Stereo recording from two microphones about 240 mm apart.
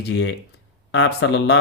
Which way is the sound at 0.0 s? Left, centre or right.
Left.